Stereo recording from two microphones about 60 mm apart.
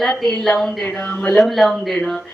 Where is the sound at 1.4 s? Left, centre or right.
Centre.